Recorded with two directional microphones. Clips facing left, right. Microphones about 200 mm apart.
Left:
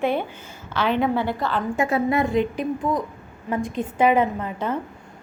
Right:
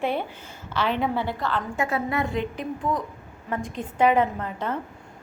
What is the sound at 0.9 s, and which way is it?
Speech, centre (ahead or behind).